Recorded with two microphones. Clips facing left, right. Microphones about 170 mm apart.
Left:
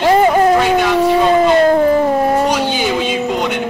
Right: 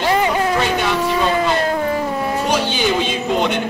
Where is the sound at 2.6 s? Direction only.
10° left (ahead or behind).